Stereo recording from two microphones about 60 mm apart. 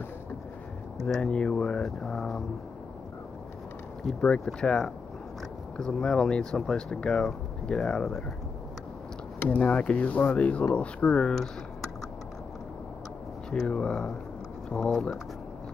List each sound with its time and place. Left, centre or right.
1.0 s speech: centre
4.0 s speech: centre
9.4 s speech: left
9.7 s speech: centre
13.5 s speech: centre